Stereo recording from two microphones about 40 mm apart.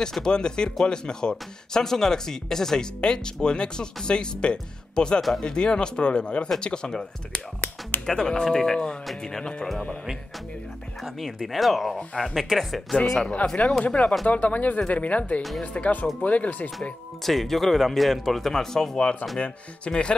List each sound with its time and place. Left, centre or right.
0.1 s speech: centre
11.1 s speech: centre
13.8 s speech: left
14.2 s speech: left
17.2 s speech: centre
19.4 s speech: left